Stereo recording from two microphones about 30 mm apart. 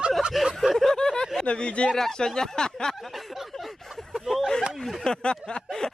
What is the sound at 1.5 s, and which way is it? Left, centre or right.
Speech, left.